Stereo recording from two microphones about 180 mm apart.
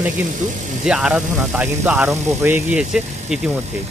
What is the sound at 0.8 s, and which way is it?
Speech, 5° right (ahead or behind).